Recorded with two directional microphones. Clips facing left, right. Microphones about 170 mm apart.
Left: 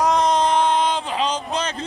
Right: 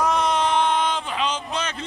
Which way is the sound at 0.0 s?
35° left (ahead or behind).